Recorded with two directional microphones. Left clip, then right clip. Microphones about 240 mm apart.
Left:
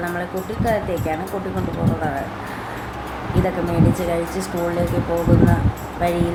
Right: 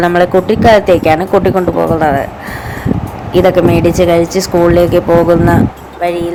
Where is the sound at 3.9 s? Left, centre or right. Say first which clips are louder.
Right 13 dB; right.